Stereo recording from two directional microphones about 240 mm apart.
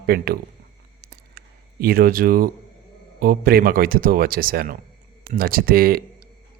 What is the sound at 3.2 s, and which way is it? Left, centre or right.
Speech, right.